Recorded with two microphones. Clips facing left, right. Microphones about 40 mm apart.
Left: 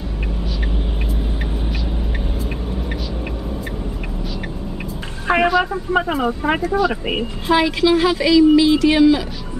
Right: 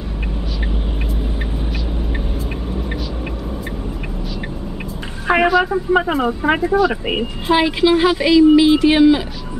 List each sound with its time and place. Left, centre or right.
5.3 s speech: centre; by 9.2 s right